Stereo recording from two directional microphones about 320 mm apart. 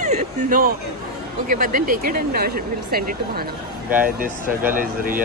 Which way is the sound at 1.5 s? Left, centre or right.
Right.